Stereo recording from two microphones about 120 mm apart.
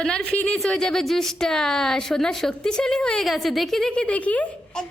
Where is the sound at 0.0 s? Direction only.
5° left (ahead or behind).